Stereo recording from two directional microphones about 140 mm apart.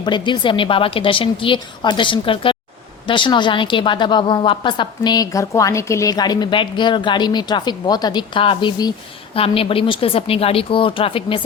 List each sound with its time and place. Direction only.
0.0 s a woman's voice: 35° left (ahead or behind)